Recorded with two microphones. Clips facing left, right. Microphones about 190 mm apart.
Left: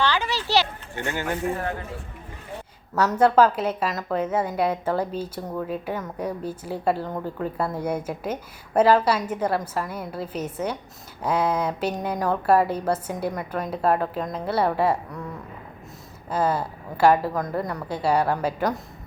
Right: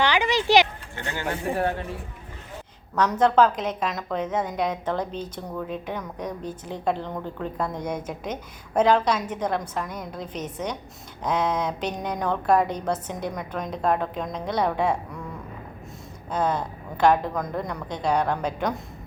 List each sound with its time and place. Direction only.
0.0 s a sound: 15° right (ahead or behind)
0.9 s a woman's voice: 15° left (ahead or behind)
2.9 s a woman's voice: 5° left (ahead or behind)
16.3 s a woman's voice: 5° left (ahead or behind)